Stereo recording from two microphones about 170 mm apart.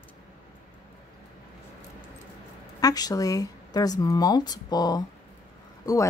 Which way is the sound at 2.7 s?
20° left (ahead or behind).